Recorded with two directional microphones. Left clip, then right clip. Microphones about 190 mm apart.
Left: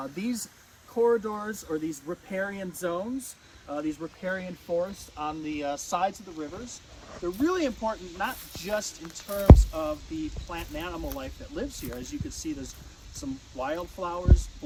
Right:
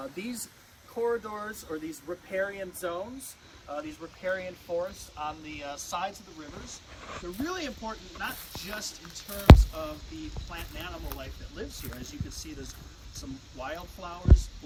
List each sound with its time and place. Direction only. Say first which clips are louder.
0.0 s speech: left 4 dB; 45° left (ahead or behind)
6.7 s speech: right 2 dB; 25° left (ahead or behind)